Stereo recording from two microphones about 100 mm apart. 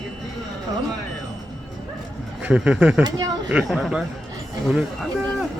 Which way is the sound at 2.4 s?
10° right (ahead or behind).